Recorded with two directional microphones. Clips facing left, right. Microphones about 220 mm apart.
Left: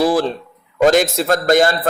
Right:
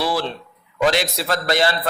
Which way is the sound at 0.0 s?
45° left (ahead or behind).